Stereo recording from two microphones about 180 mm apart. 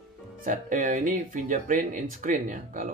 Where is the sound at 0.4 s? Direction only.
45° right (ahead or behind).